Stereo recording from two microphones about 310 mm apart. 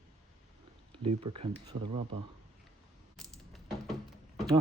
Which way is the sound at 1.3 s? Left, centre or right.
Centre.